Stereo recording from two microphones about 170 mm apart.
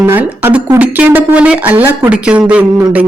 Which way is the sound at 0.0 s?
10° right (ahead or behind).